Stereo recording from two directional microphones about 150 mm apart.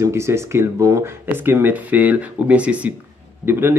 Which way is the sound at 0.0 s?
20° right (ahead or behind).